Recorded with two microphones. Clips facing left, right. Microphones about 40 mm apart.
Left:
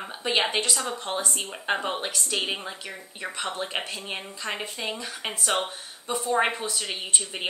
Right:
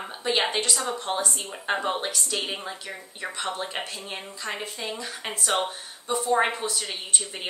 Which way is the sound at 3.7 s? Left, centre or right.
Centre.